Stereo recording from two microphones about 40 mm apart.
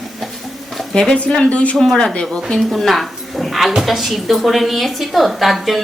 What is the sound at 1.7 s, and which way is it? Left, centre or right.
A woman's voice, centre.